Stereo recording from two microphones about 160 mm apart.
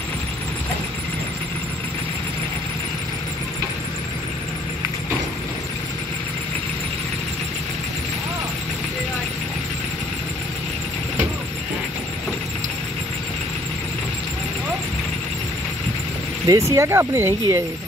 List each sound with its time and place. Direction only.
16.4 s speech: 20° right (ahead or behind)